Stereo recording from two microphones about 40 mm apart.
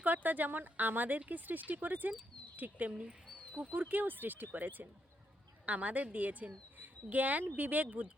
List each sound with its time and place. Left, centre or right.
0.0 s speech: right
5.6 s speech: right